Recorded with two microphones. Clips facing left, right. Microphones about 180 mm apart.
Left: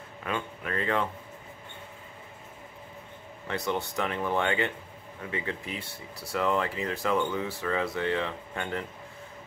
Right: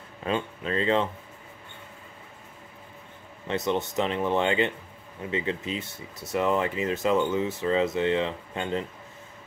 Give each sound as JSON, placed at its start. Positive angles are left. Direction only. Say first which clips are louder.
{"t": 0.2, "sound": "speech", "louder": "right 5 dB", "side_deg": -25}
{"t": 3.4, "sound": "speech", "louder": "right 4 dB", "side_deg": -20}